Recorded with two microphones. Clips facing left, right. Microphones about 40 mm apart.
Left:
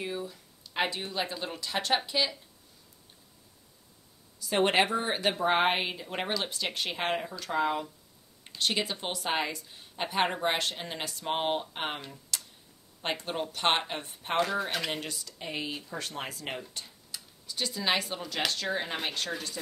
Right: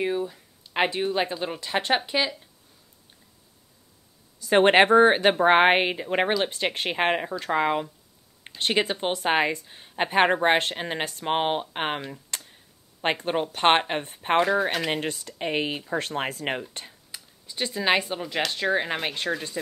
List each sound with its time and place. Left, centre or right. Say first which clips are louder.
0.0 s speech: right 9 dB; right
4.4 s speech: right 8 dB; right
12.3 s a sound: left 3 dB; right
13.0 s speech: right 7 dB; right
14.9 s speech: right 8 dB; right
17.1 s speech: right 1 dB; right